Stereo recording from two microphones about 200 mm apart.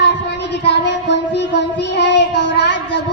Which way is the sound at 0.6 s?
60° left (ahead or behind).